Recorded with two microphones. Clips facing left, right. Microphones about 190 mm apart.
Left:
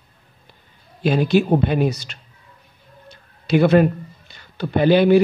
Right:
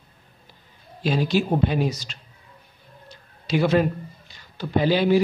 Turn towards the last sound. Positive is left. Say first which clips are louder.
# left 5 dB
turn(degrees=60)  # may be behind; listen again after turning